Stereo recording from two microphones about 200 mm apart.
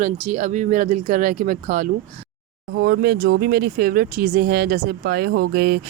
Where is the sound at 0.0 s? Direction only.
35° right (ahead or behind).